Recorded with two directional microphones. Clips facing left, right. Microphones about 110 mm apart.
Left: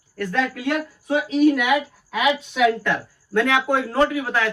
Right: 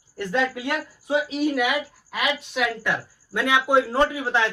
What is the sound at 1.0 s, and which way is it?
Speech, 10° right (ahead or behind).